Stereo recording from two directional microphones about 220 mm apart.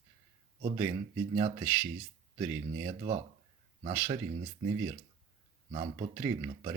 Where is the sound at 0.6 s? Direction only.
25° right (ahead or behind).